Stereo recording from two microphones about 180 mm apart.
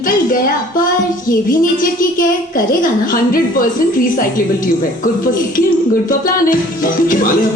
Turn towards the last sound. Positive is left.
turn(degrees=50)  # may be behind; listen again after turning